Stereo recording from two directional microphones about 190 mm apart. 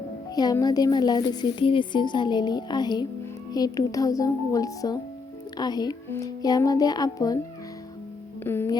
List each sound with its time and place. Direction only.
0.3 s a woman's voice: 20° left (ahead or behind)
8.4 s speech: 10° left (ahead or behind)